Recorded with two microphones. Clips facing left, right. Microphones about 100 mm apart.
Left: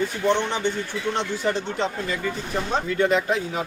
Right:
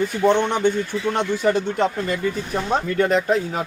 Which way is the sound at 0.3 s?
55° right (ahead or behind).